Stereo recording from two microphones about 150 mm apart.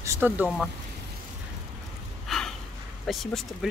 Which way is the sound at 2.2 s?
5° left (ahead or behind).